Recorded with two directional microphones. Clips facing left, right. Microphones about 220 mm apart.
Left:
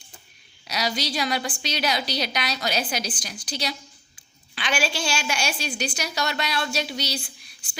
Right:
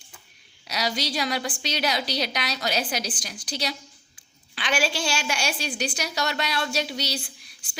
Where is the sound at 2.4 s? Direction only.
30° right (ahead or behind).